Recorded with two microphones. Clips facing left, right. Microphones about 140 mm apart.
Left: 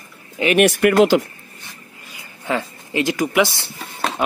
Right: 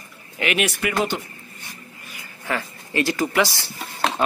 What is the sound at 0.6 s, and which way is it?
Speech, 60° left (ahead or behind).